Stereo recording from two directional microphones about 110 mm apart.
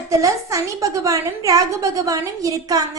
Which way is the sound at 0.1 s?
30° right (ahead or behind).